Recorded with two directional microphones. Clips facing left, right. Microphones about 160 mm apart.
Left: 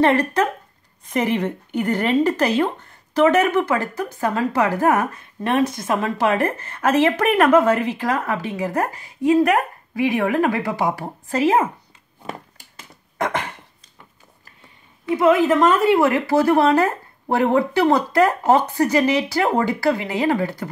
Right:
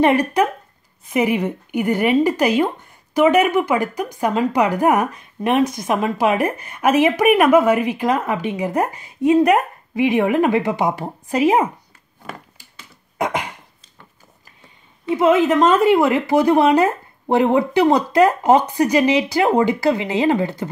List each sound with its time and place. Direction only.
0.0 s speech: 15° right (ahead or behind)
13.2 s speech: 10° right (ahead or behind)
15.0 s speech: 25° right (ahead or behind)